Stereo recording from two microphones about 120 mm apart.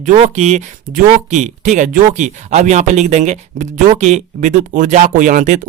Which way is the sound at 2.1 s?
80° right.